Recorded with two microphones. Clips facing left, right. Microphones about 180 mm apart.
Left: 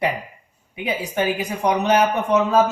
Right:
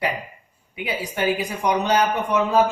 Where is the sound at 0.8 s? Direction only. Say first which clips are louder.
Left 1 dB; 25° left (ahead or behind).